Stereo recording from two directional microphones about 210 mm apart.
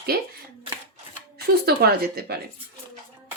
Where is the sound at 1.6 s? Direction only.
45° right (ahead or behind).